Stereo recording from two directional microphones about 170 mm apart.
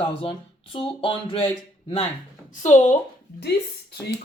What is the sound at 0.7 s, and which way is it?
Speech, 30° left (ahead or behind).